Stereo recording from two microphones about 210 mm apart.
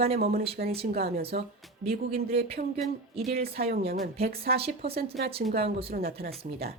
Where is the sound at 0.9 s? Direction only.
45° right (ahead or behind).